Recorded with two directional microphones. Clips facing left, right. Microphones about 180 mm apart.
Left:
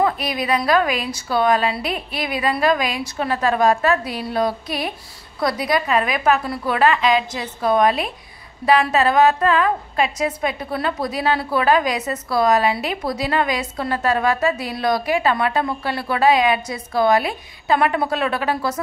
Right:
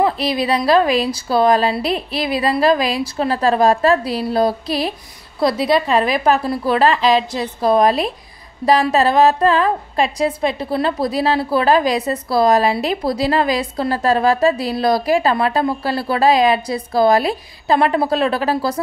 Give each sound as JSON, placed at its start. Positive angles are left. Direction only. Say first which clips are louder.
{"t": 0.0, "sound": "a woman's voice", "louder": "right 3 dB", "side_deg": -30}